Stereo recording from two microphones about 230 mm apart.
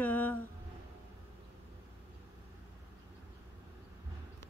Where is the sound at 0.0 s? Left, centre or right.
Centre.